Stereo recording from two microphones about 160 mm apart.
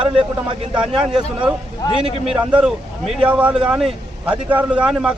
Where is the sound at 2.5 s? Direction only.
5° right (ahead or behind).